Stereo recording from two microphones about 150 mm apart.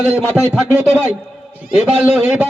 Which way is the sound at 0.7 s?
15° right (ahead or behind).